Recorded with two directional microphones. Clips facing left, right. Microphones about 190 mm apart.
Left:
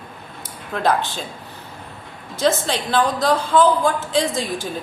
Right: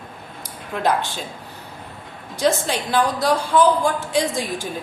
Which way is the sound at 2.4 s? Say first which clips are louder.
Left 1 dB; 15° right (ahead or behind).